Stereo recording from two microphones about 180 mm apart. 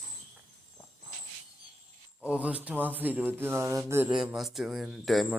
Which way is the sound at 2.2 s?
5° right (ahead or behind).